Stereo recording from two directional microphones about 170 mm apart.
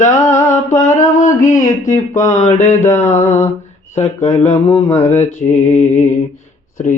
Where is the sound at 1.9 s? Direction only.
20° left (ahead or behind).